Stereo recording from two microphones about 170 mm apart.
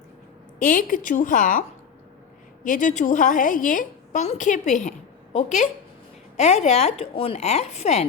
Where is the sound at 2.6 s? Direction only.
50° left (ahead or behind).